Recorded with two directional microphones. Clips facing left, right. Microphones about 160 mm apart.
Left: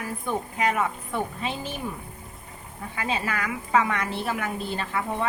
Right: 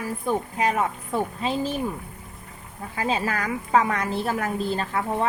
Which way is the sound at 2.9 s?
40° right (ahead or behind).